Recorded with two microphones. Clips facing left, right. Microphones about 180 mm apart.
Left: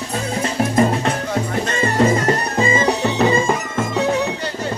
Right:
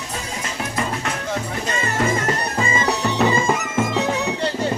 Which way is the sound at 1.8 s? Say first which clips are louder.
Left 6 dB; 35° left (ahead or behind).